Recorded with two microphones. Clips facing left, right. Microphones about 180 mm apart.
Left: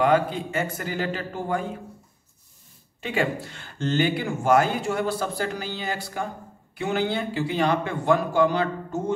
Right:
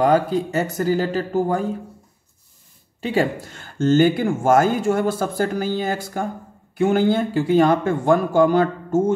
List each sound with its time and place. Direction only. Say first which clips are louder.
0.0 s speech: right 4 dB; 40° right (ahead or behind)
3.0 s speech: right 5 dB; 35° right (ahead or behind)